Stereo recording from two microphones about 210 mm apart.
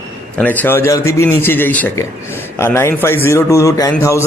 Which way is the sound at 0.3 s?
10° left (ahead or behind).